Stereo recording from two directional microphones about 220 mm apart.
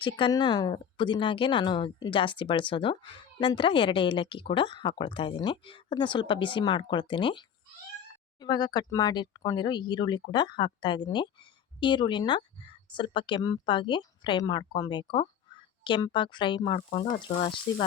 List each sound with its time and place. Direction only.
0.0 s speech: 20° left (ahead or behind)